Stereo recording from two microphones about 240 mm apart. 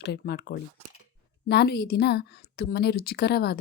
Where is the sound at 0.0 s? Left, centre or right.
Left.